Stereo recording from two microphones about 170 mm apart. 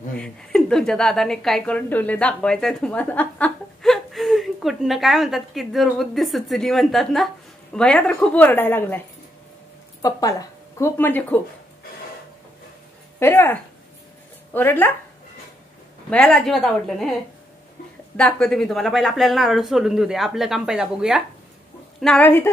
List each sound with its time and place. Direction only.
0.2 s a woman's voice: 5° left (ahead or behind)
10.0 s a woman's voice: 20° left (ahead or behind)
13.2 s a woman's voice: 15° left (ahead or behind)
16.1 s a woman's voice: 5° left (ahead or behind)
18.1 s a woman's voice: 5° left (ahead or behind)
22.0 s a woman's voice: 10° left (ahead or behind)